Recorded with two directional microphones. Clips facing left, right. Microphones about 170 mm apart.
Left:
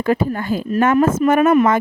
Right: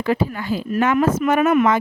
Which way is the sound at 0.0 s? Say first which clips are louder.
Left 3 dB; 45° left (ahead or behind).